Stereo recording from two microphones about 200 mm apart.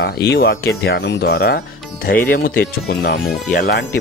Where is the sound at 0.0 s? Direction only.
50° left (ahead or behind).